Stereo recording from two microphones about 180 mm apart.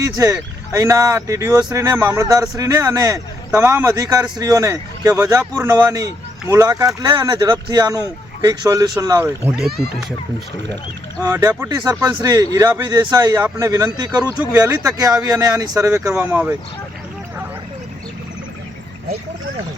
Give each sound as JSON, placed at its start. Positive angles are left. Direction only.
{"t": 0.0, "sound": "a man's voice", "side_deg": -20}
{"t": 11.2, "sound": "a man's voice", "side_deg": -15}